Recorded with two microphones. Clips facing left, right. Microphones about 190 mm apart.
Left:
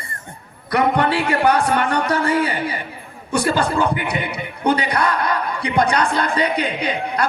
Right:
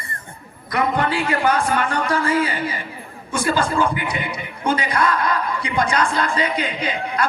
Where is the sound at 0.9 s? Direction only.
65° left (ahead or behind).